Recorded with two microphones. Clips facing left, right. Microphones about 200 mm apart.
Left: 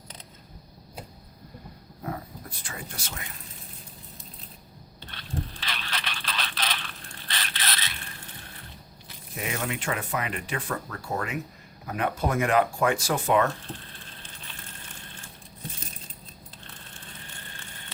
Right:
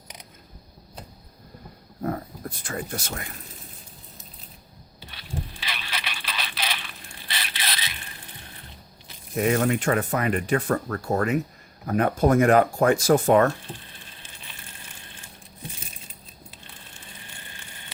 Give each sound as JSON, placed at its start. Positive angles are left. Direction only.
{"t": 2.0, "sound": "speech", "side_deg": -45}
{"t": 4.9, "sound": "a sound", "side_deg": -10}
{"t": 9.3, "sound": "speech", "side_deg": -45}